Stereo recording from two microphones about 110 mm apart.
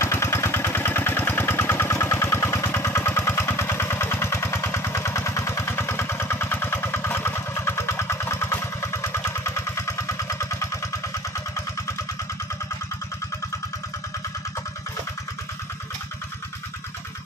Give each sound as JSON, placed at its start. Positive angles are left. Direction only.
{"t": 0.0, "sound": "engine", "side_deg": 25}